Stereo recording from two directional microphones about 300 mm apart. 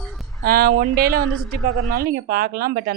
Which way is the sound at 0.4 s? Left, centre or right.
Right.